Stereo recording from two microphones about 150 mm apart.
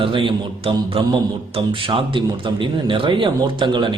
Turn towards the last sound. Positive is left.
turn(degrees=-30)  # may be behind; listen again after turning